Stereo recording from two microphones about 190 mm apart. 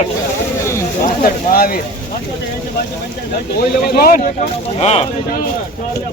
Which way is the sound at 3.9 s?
50° left (ahead or behind).